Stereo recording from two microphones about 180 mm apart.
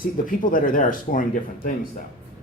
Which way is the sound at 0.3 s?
50° left (ahead or behind).